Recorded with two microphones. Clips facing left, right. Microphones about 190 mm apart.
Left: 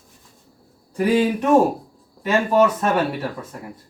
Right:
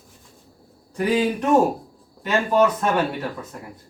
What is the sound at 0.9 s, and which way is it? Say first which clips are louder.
Speech: left 3 dB; 5° left (ahead or behind).